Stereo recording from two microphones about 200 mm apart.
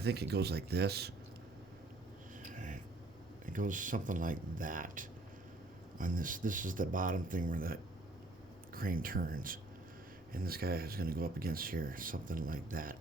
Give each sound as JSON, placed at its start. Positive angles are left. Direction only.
{"t": 0.0, "sound": "speech", "side_deg": -55}
{"t": 2.5, "sound": "a sound", "side_deg": -40}
{"t": 3.4, "sound": "speech", "side_deg": -40}